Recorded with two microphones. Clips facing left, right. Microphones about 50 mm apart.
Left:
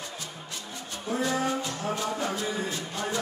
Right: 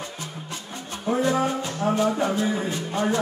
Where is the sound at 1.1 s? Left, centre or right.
Right.